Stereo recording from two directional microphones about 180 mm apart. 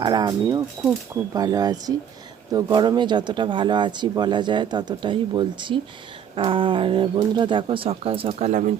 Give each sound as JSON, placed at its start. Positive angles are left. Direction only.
{"t": 0.0, "sound": "speech", "side_deg": -20}